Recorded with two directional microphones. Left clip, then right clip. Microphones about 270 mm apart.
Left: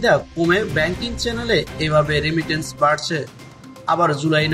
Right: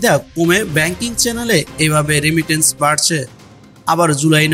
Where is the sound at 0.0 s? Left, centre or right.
Right.